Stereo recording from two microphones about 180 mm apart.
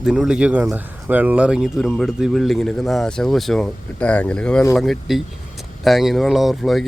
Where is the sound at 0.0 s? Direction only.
5° right (ahead or behind).